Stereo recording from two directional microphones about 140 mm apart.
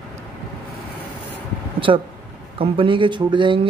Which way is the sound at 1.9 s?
40° right (ahead or behind).